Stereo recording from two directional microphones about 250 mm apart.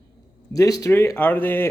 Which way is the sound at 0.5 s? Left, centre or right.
Centre.